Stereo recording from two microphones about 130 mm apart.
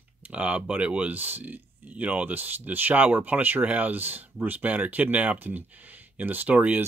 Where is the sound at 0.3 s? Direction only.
10° right (ahead or behind).